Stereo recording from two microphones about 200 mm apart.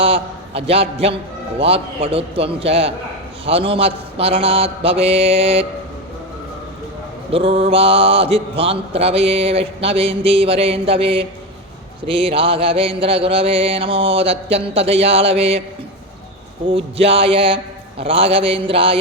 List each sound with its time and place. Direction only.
0.0 s mantra: 30° right (ahead or behind)
7.3 s mantra: 30° right (ahead or behind)
16.6 s mantra: 25° right (ahead or behind)